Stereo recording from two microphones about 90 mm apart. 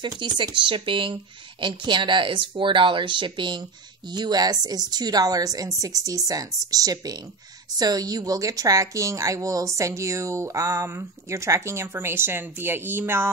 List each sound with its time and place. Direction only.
0.0 s a woman's voice: 60° right (ahead or behind); by 13.3 s 25° right (ahead or behind)